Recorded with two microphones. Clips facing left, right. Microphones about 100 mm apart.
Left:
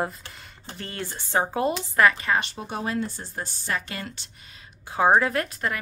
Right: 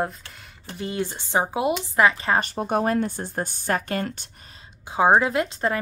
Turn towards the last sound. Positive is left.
turn(degrees=-25)  # may be behind; listen again after turning